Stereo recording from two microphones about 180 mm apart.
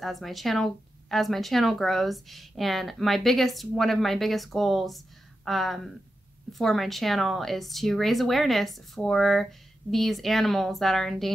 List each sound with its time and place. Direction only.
0.0 s speech: centre (ahead or behind)